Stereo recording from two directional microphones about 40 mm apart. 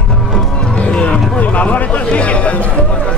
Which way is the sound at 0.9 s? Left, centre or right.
Left.